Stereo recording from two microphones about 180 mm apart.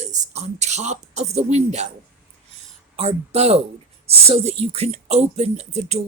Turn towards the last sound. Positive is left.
turn(degrees=-35)  # may be behind; listen again after turning